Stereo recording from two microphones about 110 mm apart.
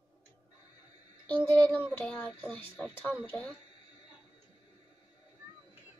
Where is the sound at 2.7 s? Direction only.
15° left (ahead or behind).